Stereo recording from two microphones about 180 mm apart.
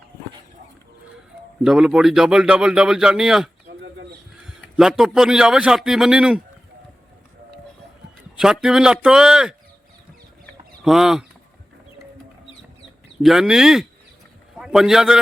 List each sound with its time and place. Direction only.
1.6 s a man's voice: 5° right (ahead or behind)
8.4 s a man's voice: 5° right (ahead or behind)
10.8 s a man's voice: centre (ahead or behind)
13.2 s a man's voice: 5° right (ahead or behind)